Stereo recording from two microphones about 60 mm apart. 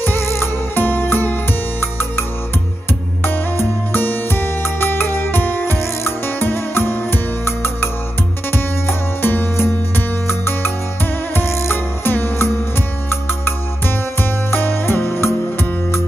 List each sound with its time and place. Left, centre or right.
0.0 s music: left
3.3 s music: left